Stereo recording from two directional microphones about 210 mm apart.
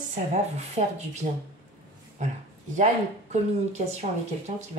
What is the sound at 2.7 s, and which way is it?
Speech, 35° right (ahead or behind).